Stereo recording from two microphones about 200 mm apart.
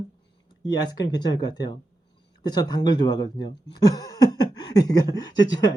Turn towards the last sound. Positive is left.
turn(degrees=20)  # may be behind; listen again after turning